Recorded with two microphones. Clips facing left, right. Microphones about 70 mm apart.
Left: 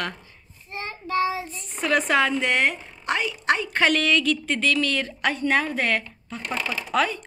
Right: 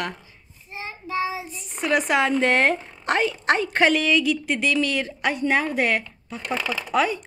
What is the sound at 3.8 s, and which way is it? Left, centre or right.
A woman's voice, centre.